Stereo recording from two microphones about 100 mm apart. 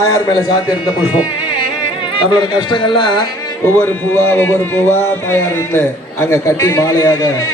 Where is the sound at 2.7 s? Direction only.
50° left (ahead or behind).